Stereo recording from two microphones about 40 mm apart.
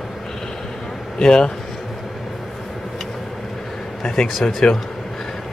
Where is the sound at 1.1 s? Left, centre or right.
Centre.